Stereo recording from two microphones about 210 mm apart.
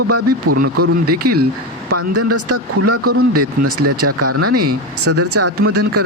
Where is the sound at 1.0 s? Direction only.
45° right (ahead or behind).